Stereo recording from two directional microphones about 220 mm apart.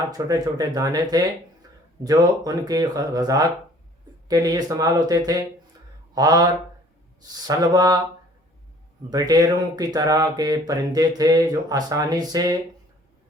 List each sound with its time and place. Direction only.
0.1 s speech: 15° right (ahead or behind)
9.0 s speech: 15° right (ahead or behind)